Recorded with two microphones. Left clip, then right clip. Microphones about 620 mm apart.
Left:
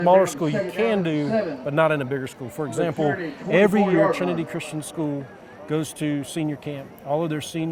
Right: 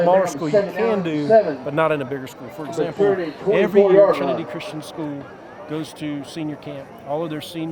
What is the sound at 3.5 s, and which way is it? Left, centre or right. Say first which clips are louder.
Speech: right 4 dB; left.